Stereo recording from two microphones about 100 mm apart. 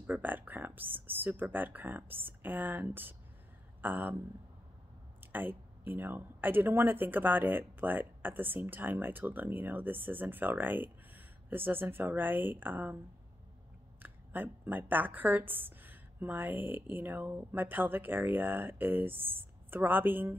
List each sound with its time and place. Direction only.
0.0 s speech: 20° right (ahead or behind)
5.3 s speech: 20° right (ahead or behind)
14.0 s speech: 20° right (ahead or behind)